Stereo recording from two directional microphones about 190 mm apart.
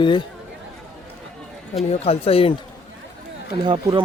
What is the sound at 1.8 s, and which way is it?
Speech, 30° left (ahead or behind).